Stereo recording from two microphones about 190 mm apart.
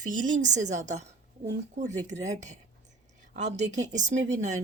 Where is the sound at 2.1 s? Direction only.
65° right (ahead or behind).